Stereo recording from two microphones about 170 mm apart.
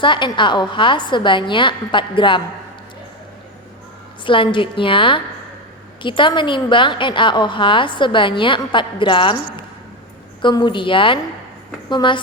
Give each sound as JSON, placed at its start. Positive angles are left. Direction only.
{"t": 0.0, "sound": "a woman's voice", "side_deg": 30}
{"t": 4.2, "sound": "a woman's voice", "side_deg": 30}
{"t": 10.4, "sound": "a woman's voice", "side_deg": 25}